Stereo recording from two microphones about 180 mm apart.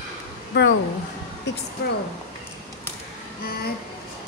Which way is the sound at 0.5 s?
75° left (ahead or behind).